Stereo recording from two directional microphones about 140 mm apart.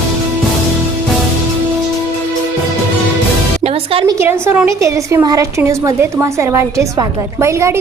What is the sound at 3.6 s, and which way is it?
Music, 45° right (ahead or behind).